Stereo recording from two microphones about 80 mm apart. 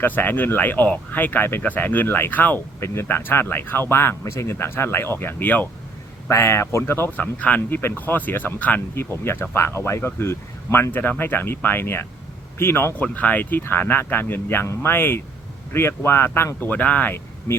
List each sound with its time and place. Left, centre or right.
0.0 s speech: left
6.2 s speech: left
7.3 s speech: centre